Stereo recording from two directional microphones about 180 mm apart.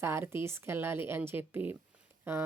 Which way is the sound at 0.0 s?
15° right (ahead or behind).